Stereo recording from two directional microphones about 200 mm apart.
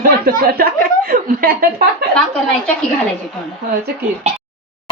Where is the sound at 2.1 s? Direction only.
5° left (ahead or behind).